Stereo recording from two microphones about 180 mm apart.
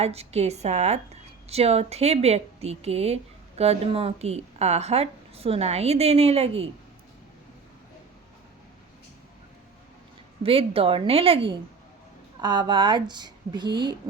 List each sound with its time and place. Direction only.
0.0 s a woman's voice: 35° right (ahead or behind)
10.4 s a woman's voice: 30° right (ahead or behind)